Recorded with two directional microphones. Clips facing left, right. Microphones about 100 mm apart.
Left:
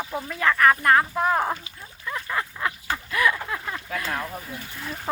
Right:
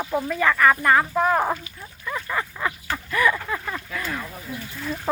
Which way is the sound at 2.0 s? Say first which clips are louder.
Right 1 dB; 5° left (ahead or behind).